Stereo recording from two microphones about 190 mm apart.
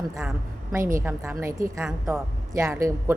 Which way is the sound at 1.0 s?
10° right (ahead or behind).